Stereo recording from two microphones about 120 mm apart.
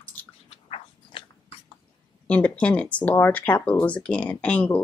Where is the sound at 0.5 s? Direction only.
50° left (ahead or behind).